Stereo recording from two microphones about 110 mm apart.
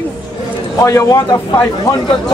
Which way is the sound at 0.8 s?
30° left (ahead or behind).